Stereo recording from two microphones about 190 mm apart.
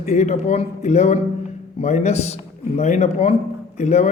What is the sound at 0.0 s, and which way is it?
A man's voice, 35° left (ahead or behind).